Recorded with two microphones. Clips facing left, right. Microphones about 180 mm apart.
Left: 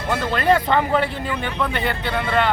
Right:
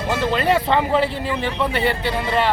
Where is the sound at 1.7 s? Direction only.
5° right (ahead or behind).